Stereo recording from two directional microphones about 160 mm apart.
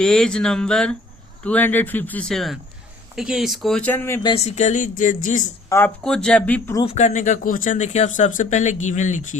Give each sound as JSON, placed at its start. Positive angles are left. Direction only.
{"t": 0.0, "sound": "speech", "side_deg": 5}
{"t": 4.4, "sound": "speech", "side_deg": 45}
{"t": 5.6, "sound": "speech", "side_deg": 15}
{"t": 6.0, "sound": "speech", "side_deg": 5}
{"t": 6.8, "sound": "speech", "side_deg": 45}